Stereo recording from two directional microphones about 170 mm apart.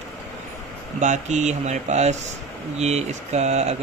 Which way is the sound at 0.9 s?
45° right (ahead or behind).